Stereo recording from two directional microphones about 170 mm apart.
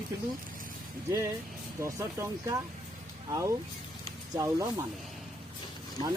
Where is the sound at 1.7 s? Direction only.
15° right (ahead or behind).